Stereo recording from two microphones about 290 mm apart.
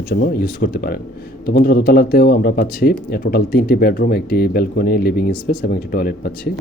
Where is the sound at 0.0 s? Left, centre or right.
Left.